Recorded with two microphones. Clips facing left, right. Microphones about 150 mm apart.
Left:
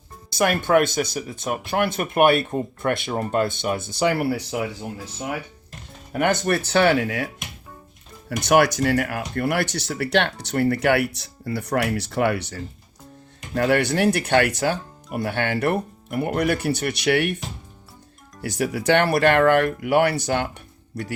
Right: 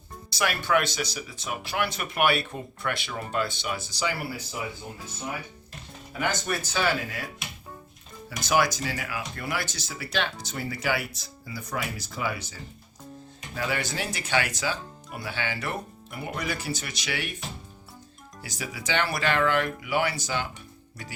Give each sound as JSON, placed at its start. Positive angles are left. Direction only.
{"t": 0.3, "sound": "speech", "side_deg": 50}
{"t": 6.1, "sound": "speech", "side_deg": 60}
{"t": 8.3, "sound": "speech", "side_deg": 65}
{"t": 18.4, "sound": "speech", "side_deg": 60}